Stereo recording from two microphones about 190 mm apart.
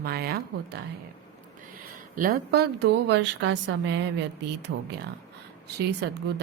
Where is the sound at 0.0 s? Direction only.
55° right (ahead or behind).